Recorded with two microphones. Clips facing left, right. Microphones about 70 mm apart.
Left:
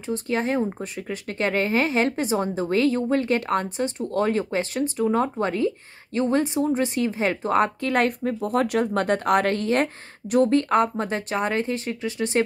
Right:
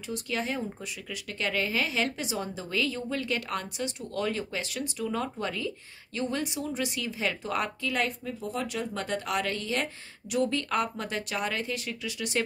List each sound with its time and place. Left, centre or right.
0.1 s speech: left